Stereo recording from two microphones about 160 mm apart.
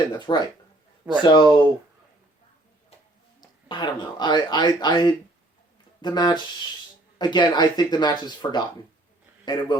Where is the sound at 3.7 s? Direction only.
30° left (ahead or behind).